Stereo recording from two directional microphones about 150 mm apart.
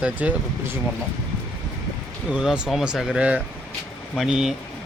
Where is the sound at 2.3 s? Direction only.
5° right (ahead or behind).